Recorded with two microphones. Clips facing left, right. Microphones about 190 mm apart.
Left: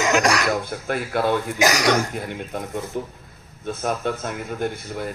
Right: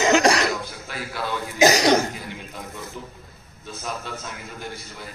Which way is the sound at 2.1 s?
55° left (ahead or behind).